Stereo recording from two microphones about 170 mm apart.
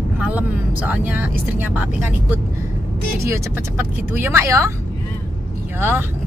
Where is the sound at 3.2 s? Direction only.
15° right (ahead or behind).